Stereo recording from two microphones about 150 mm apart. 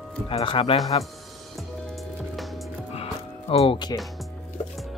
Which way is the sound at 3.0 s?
40° left (ahead or behind).